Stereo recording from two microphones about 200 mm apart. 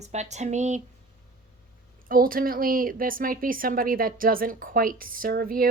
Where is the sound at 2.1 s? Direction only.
45° right (ahead or behind).